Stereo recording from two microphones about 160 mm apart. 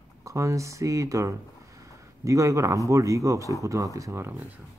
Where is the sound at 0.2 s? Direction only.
20° right (ahead or behind).